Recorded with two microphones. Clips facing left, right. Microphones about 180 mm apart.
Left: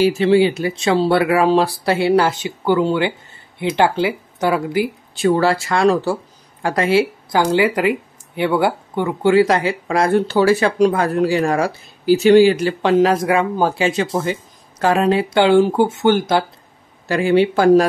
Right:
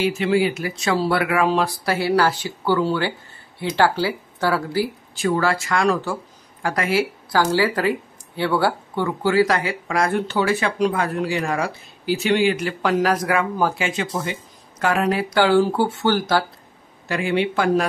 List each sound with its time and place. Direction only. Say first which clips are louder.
0.0 s speech: left 6 dB; 35° left (ahead or behind); by 5.3 s 20° left (ahead or behind)
5.3 s speech: left 4 dB; 30° left (ahead or behind)
17.1 s speech: left 7 dB; 35° left (ahead or behind)